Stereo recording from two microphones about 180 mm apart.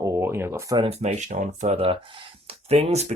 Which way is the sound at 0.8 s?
35° right (ahead or behind).